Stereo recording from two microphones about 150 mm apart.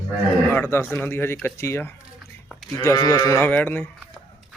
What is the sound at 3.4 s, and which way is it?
Speech, 10° left (ahead or behind).